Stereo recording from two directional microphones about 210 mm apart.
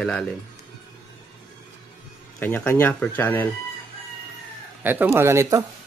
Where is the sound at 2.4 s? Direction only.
10° left (ahead or behind).